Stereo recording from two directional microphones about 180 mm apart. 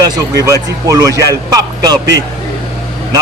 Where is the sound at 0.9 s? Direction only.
20° right (ahead or behind).